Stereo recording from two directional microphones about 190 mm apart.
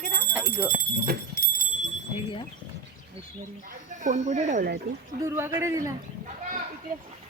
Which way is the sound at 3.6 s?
40° right (ahead or behind).